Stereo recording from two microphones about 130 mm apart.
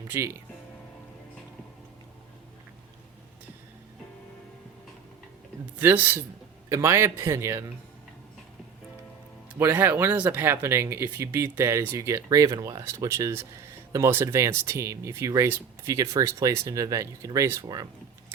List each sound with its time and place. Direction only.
0.1 s speech: 20° right (ahead or behind)
5.8 s speech: 15° right (ahead or behind)
9.6 s speech: 15° right (ahead or behind)